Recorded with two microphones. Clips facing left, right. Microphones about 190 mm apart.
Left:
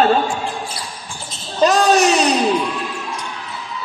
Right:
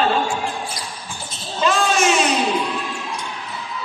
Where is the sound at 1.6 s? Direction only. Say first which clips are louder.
Left 5 dB; 40° left (ahead or behind).